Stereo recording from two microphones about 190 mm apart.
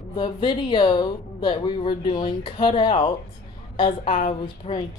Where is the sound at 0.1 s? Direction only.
25° left (ahead or behind).